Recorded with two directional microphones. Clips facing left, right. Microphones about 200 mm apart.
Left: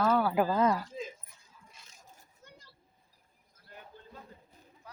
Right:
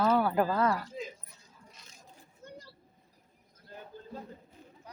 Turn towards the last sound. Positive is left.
turn(degrees=-35)  # may be behind; listen again after turning